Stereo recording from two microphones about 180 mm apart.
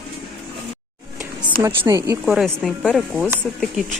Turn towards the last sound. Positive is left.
turn(degrees=0)  # may be behind; listen again after turning